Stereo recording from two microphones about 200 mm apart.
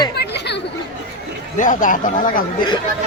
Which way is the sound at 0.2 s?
60° left (ahead or behind).